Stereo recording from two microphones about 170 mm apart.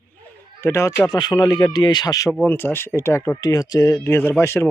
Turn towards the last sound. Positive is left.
turn(degrees=15)  # may be behind; listen again after turning